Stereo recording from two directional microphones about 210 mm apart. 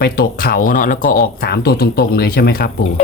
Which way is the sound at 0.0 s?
45° left (ahead or behind).